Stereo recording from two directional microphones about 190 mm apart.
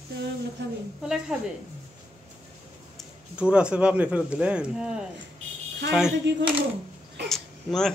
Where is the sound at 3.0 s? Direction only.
5° right (ahead or behind).